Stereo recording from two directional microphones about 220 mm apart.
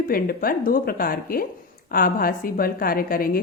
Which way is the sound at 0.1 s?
40° left (ahead or behind).